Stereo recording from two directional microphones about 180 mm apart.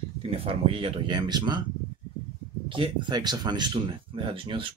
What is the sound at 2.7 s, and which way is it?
Speech, 30° right (ahead or behind).